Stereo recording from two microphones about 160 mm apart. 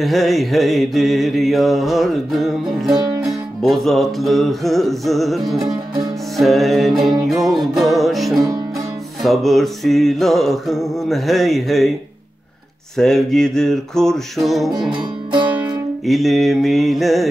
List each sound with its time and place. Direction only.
0.0 s mantra: centre (ahead or behind)
12.9 s mantra: centre (ahead or behind)
14.7 s music: 30° right (ahead or behind)
16.1 s mantra: centre (ahead or behind)